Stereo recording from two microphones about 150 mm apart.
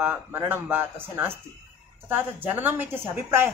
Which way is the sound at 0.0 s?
15° right (ahead or behind).